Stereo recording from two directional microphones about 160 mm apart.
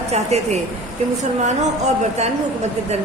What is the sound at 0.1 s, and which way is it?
Speech, 40° right (ahead or behind).